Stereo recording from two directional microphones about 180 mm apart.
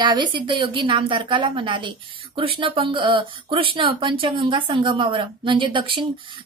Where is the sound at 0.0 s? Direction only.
25° right (ahead or behind).